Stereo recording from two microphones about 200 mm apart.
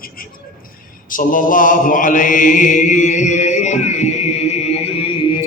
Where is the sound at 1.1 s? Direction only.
40° left (ahead or behind); by 5.4 s 25° left (ahead or behind).